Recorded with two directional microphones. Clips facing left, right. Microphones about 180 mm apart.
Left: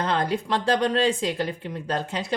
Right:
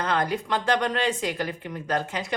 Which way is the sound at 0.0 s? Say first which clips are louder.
Left 1 dB; 30° left (ahead or behind).